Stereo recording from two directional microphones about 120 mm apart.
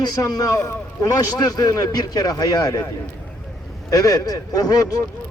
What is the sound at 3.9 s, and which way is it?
Speech, 30° left (ahead or behind).